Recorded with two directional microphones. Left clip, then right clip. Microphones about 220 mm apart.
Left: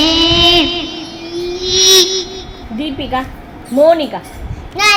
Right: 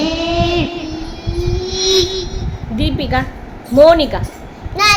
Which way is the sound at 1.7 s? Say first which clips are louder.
Left 6 dB; 30° left (ahead or behind).